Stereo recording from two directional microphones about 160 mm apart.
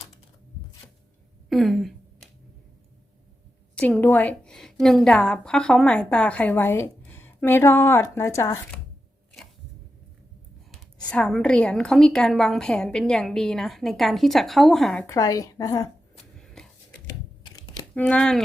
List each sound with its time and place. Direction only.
1.5 s a sound: centre (ahead or behind)
3.8 s a woman's voice: 10° left (ahead or behind)
11.1 s a woman's voice: 5° left (ahead or behind)
15.0 s a woman's voice: 20° left (ahead or behind)
16.6 s a sound: 5° left (ahead or behind)
17.9 s a woman's voice: 5° left (ahead or behind)